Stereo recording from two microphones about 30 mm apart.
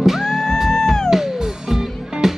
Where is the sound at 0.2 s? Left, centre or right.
Centre.